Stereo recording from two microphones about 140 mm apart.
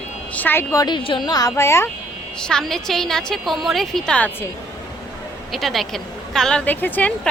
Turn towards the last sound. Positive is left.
turn(degrees=10)  # may be behind; listen again after turning